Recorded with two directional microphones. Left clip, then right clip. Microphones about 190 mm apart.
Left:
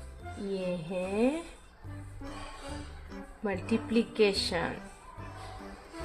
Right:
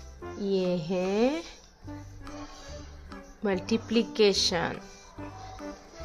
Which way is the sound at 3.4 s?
25° right (ahead or behind).